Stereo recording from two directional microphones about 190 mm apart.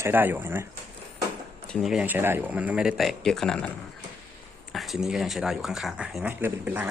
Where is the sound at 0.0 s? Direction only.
10° right (ahead or behind).